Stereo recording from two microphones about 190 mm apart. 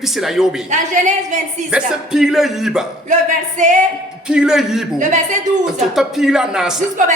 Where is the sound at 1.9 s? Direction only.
Centre (ahead or behind).